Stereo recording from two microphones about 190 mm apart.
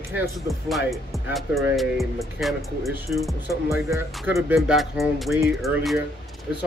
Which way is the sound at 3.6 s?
15° right (ahead or behind).